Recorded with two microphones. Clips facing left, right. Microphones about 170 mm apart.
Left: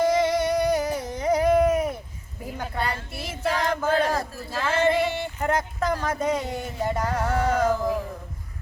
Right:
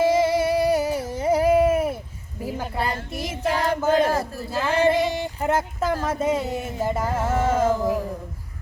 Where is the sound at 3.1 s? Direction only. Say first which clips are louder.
Right 5 dB; 45° right (ahead or behind).